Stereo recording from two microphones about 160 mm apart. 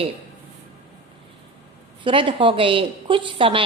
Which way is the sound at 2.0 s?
35° right (ahead or behind).